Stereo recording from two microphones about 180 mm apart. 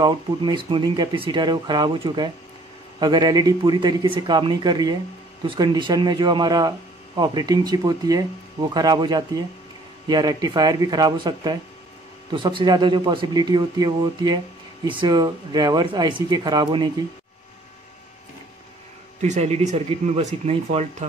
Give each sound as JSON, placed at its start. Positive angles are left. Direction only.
{"t": 0.0, "sound": "speech", "side_deg": -25}
{"t": 19.2, "sound": "speech", "side_deg": -40}